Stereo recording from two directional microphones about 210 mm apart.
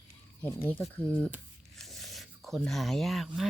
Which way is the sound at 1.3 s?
Centre (ahead or behind).